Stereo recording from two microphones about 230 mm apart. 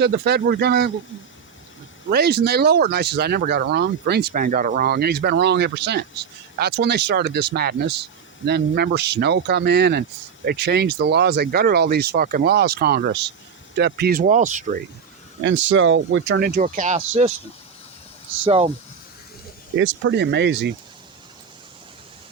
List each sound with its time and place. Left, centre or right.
0.0 s speech: right
2.0 s speech: right
15.4 s speech: right
18.4 s speech: right
19.7 s speech: right